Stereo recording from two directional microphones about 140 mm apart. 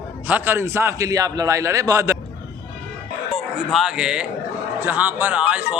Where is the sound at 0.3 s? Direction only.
15° right (ahead or behind).